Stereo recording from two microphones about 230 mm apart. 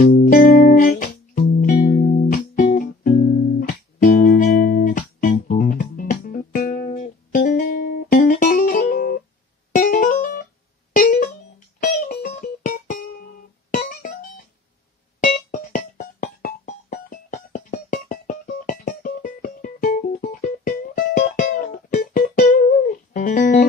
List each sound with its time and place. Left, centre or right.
0.0 s music: left